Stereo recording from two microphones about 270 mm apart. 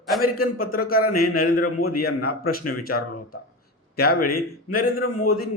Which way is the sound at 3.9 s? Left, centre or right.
Left.